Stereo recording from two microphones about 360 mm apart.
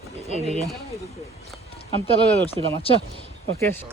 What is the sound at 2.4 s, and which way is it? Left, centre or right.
Speech, centre.